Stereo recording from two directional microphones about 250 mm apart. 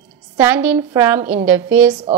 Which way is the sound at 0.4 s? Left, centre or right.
Centre.